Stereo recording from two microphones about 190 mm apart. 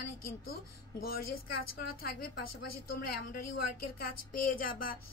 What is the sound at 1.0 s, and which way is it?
A woman's voice, 50° left (ahead or behind).